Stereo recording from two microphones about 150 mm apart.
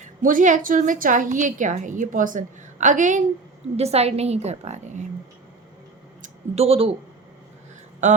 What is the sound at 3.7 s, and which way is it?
A woman's voice, 45° right (ahead or behind).